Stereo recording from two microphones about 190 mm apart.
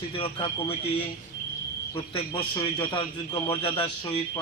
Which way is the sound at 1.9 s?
20° left (ahead or behind).